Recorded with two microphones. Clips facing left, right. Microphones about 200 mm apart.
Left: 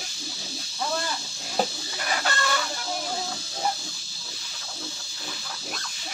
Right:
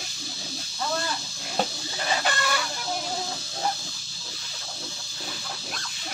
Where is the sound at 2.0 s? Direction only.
25° right (ahead or behind).